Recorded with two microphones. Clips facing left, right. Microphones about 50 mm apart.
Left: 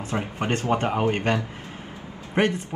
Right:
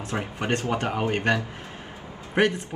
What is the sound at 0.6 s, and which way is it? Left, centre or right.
Speech, left.